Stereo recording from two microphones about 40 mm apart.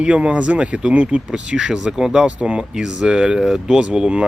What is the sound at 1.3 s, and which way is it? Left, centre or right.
Speech, right.